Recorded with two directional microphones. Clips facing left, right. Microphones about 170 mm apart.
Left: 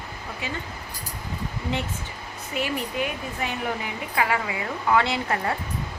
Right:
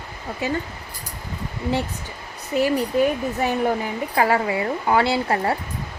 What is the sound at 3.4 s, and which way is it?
Speech, 40° right (ahead or behind).